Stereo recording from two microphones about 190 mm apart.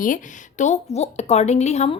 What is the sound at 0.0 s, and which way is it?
A woman's voice, 40° left (ahead or behind).